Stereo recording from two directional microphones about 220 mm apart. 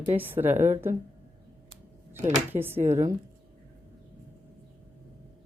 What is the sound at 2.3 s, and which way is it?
Speech, 10° right (ahead or behind).